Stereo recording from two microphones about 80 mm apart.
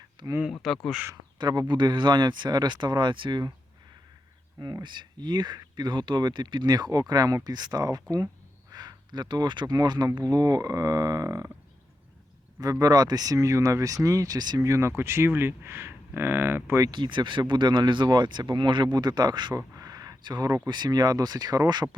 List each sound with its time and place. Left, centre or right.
0.2 s speech: right
0.6 s speech: centre
1.4 s speech: right
4.8 s speech: right
12.8 s speech: right
14.6 s speech: right
16.9 s speech: right
19.5 s a sound: right
20.7 s speech: right